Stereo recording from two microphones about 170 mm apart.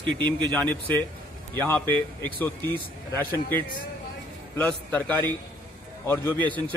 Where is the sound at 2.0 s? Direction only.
10° left (ahead or behind).